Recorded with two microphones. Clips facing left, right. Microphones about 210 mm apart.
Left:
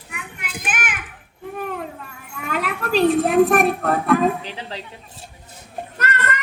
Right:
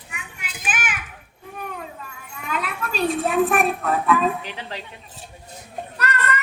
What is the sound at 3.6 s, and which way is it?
Child singing, 70° left (ahead or behind).